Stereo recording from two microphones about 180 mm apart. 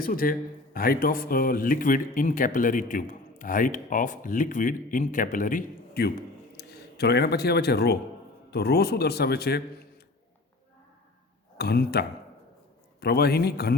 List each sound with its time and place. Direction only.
0.0 s a man's voice: 50° left (ahead or behind)
11.5 s a man's voice: 60° left (ahead or behind)